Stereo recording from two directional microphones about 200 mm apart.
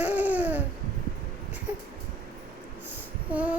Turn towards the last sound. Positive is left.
turn(degrees=-5)  # may be behind; listen again after turning